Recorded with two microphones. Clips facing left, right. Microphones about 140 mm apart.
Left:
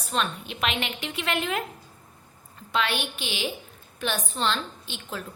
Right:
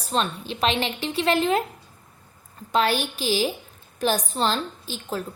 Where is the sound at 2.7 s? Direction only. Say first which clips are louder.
Right 5 dB; 40° right (ahead or behind).